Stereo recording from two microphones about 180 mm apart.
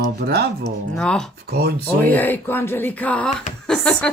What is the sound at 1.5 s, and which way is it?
Speech, 65° right (ahead or behind).